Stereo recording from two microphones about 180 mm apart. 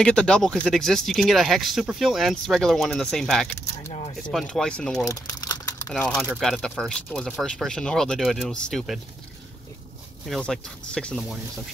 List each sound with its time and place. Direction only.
0.0 s speech: 5° left (ahead or behind)
5.0 s speech: 20° left (ahead or behind)
5.9 s speech: 5° left (ahead or behind)
10.2 s speech: centre (ahead or behind)